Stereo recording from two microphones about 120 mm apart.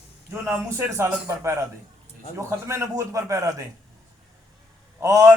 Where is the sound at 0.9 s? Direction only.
25° right (ahead or behind).